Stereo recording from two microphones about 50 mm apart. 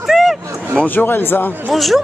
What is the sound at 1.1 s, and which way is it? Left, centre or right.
Speech, left.